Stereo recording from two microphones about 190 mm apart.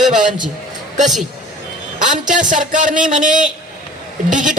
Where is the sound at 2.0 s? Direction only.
40° right (ahead or behind).